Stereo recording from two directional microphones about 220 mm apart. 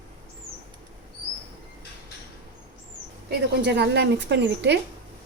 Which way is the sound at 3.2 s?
50° right (ahead or behind).